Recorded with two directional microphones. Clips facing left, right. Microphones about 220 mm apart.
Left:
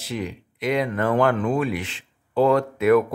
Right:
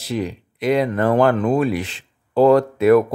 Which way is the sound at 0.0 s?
35° right (ahead or behind).